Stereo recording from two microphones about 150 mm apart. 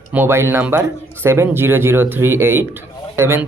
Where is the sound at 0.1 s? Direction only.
15° right (ahead or behind).